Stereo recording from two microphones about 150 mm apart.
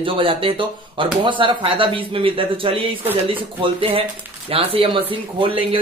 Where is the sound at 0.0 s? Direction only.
35° right (ahead or behind).